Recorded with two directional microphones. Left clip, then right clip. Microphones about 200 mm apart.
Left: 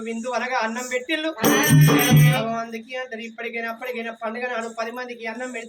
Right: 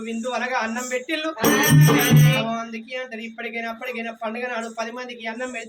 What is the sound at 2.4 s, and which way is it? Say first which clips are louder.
Speech: even; 15° right (ahead or behind).